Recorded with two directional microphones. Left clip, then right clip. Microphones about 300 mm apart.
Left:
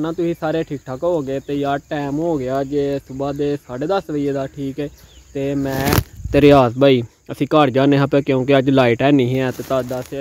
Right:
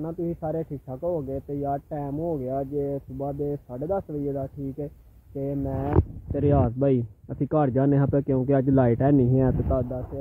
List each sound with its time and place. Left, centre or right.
0.0 s speech: centre
6.3 s speech: left
9.3 s speech: centre